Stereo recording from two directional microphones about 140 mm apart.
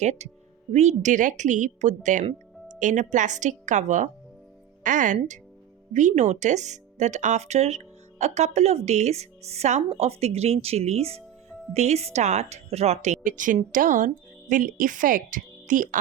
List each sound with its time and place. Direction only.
0.0 s a woman's voice: 55° right (ahead or behind); by 16.0 s 70° right (ahead or behind)